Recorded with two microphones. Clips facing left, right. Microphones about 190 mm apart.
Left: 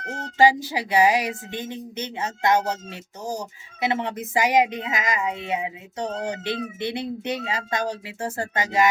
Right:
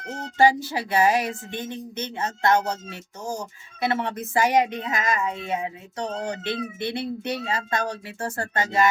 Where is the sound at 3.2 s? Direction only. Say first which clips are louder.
Left 1 dB; 40° left (ahead or behind).